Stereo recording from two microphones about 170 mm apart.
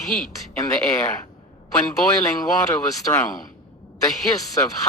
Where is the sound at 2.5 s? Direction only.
20° left (ahead or behind).